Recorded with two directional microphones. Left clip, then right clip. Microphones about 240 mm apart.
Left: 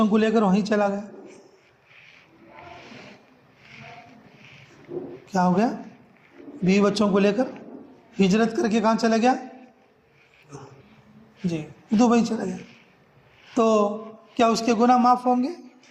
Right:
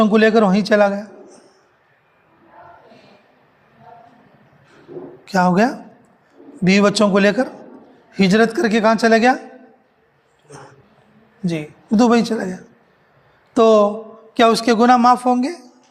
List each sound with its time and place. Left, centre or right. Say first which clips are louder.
0.0 s a man's voice: right 8 dB; right
5.2 s a man's voice: right 7 dB; right
11.4 s a man's voice: right 6 dB; right